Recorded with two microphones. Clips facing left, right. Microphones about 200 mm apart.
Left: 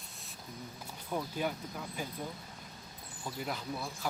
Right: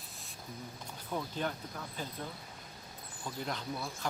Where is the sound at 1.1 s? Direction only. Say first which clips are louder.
Left 1 dB; 10° left (ahead or behind).